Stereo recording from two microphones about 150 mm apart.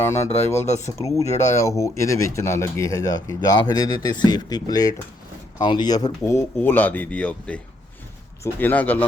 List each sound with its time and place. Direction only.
0.0 s speech: 20° left (ahead or behind)
0.3 s speech: 45° left (ahead or behind)
0.8 s speech: 20° left (ahead or behind)